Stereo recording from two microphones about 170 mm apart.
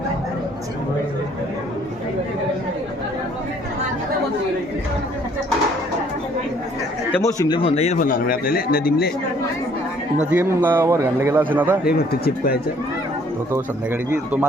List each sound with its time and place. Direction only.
7.2 s a man's voice: 20° left (ahead or behind); by 9.1 s 65° left (ahead or behind)
10.3 s a man's voice: 10° right (ahead or behind)
11.9 s speech: 65° left (ahead or behind)